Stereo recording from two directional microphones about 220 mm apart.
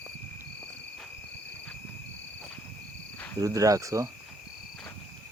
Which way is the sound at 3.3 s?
15° right (ahead or behind).